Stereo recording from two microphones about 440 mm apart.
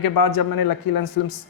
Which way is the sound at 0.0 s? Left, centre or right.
Left.